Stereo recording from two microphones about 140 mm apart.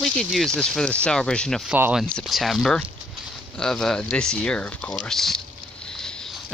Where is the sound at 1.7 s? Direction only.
10° right (ahead or behind).